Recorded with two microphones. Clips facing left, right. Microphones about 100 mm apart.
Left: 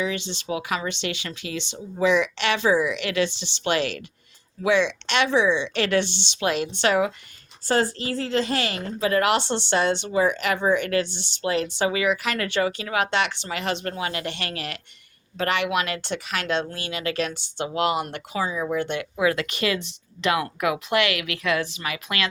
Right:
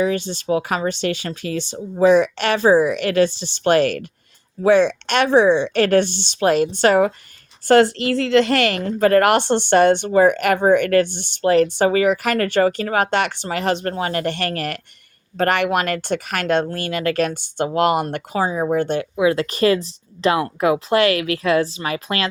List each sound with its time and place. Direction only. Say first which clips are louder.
0.0 s a woman's voice: right 7 dB; 45° right (ahead or behind)
7.7 s a woman's voice: right 9 dB; 75° right (ahead or behind); by 19.0 s 40° right (ahead or behind)
19.1 s speech: right 4 dB; 25° right (ahead or behind)